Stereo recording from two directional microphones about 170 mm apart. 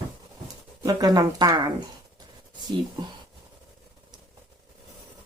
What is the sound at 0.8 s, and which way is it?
Speech, 20° right (ahead or behind).